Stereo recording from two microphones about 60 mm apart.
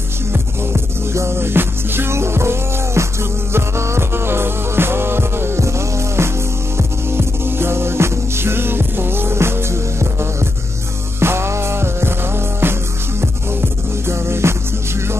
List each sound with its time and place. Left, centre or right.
0.3 s music: right
11.1 s music: right